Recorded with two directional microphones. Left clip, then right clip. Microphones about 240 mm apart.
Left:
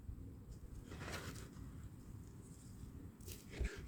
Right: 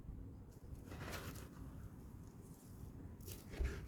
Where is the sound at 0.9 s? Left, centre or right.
Centre.